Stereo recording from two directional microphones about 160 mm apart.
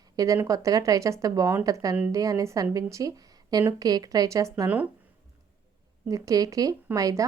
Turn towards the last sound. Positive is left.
turn(degrees=-20)  # may be behind; listen again after turning